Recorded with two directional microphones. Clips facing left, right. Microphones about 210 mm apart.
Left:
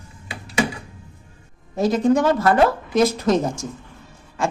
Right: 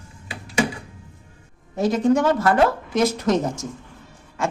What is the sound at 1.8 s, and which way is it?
A woman's voice, 35° left (ahead or behind).